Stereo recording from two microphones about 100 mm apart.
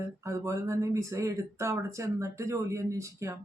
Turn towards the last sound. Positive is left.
turn(degrees=-30)  # may be behind; listen again after turning